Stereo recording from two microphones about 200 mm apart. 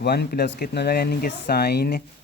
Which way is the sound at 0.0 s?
55° left (ahead or behind).